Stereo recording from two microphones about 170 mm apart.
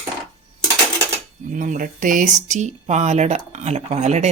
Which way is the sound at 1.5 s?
50° right (ahead or behind).